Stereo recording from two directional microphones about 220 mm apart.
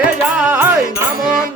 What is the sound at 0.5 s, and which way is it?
Music, 10° right (ahead or behind).